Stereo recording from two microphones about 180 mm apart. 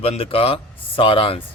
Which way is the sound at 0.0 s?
35° left (ahead or behind).